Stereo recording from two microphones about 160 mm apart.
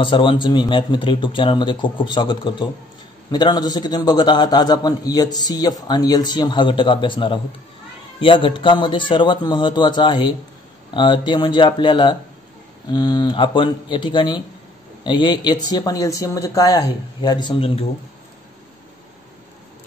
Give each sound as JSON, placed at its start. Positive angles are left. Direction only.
{"t": 0.0, "sound": "a man's voice", "side_deg": 30}